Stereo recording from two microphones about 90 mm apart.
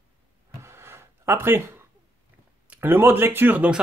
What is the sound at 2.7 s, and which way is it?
Speech, 20° right (ahead or behind).